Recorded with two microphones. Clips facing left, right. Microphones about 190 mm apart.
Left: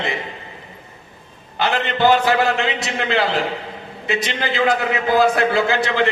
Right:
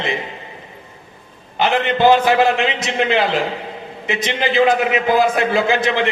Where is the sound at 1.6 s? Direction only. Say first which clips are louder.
Right 3 dB; 20° right (ahead or behind).